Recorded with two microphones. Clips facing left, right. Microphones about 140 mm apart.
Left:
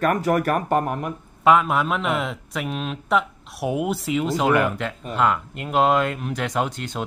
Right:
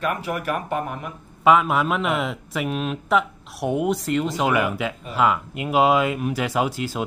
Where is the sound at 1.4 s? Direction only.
Centre (ahead or behind).